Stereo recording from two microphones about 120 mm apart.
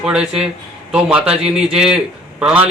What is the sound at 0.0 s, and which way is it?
Speech, 5° right (ahead or behind).